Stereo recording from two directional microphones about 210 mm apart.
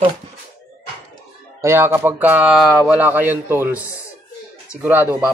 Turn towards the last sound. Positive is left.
turn(degrees=-10)  # may be behind; listen again after turning